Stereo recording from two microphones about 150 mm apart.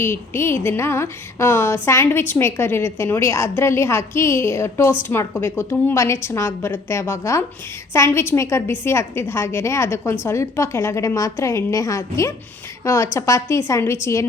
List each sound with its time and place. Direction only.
0.0 s a woman's voice: 15° left (ahead or behind)